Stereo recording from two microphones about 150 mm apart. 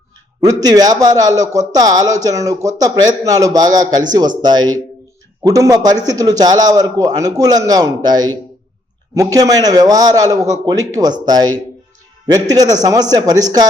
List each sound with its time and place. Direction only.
0.4 s a man's voice: 25° right (ahead or behind)